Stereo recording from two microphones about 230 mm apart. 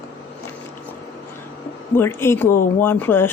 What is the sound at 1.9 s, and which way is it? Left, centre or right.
A woman's voice, centre.